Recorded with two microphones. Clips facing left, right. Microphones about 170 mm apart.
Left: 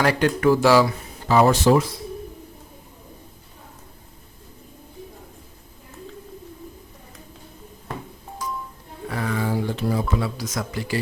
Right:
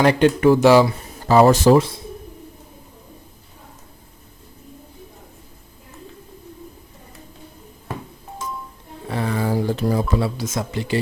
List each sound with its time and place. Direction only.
0.0 s speech: 20° right (ahead or behind)
1.3 s a man's voice: 40° right (ahead or behind)
9.0 s a sound: 30° right (ahead or behind)
10.2 s speech: 25° right (ahead or behind)